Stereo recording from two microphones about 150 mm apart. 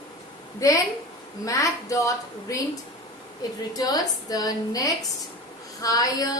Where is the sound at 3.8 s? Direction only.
25° left (ahead or behind).